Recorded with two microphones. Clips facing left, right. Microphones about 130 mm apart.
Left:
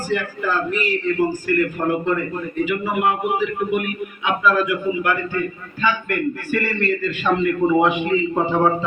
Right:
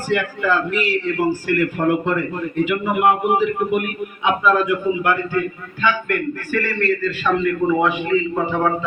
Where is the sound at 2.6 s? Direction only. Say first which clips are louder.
Right 2 dB; 70° right (ahead or behind); by 3.8 s 50° right (ahead or behind).